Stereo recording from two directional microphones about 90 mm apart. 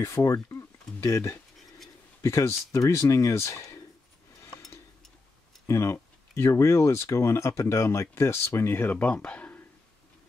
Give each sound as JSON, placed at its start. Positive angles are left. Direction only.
{"t": 0.0, "sound": "speech", "side_deg": 35}
{"t": 4.4, "sound": "a sound", "side_deg": 40}
{"t": 5.7, "sound": "speech", "side_deg": 35}